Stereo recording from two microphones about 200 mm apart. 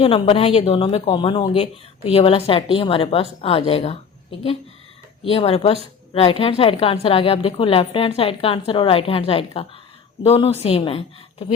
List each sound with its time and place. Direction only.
0.0 s a woman's voice: 30° left (ahead or behind)